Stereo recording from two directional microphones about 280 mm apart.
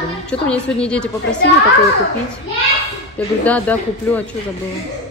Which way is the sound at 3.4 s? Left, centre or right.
Centre.